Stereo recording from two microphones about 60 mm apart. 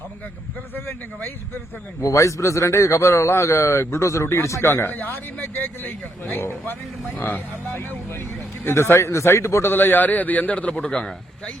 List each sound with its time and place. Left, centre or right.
2.0 s a man's voice: left
9.7 s a man's voice: left; by 11.5 s centre